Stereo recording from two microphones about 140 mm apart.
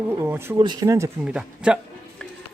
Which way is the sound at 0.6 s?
30° right (ahead or behind).